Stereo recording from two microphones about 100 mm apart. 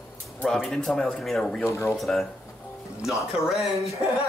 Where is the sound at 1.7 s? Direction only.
30° left (ahead or behind).